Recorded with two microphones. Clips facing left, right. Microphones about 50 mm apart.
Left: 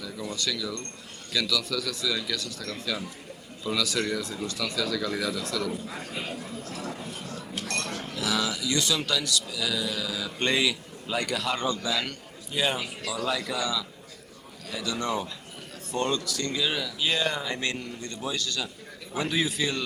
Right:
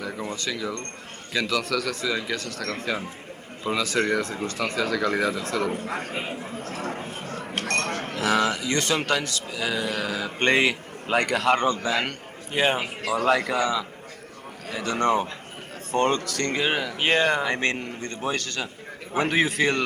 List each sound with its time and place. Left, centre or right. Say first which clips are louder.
0.0 s a man's voice: right 3 dB; right
1.6 s a man's voice: right 4 dB; right
2.5 s speech: right 5 dB; right
6.1 s speech: right 3 dB; right
17.6 s a man's voice: right 5 dB; right